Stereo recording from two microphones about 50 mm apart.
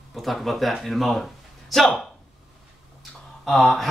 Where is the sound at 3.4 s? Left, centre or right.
Centre.